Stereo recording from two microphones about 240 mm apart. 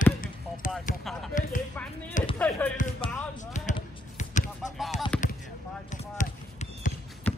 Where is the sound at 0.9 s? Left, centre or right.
Left.